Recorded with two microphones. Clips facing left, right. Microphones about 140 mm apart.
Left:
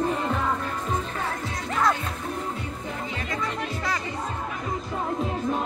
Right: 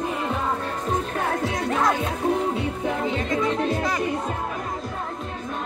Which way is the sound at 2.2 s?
85° right.